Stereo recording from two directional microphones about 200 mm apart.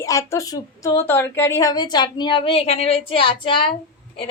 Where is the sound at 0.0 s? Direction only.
15° left (ahead or behind).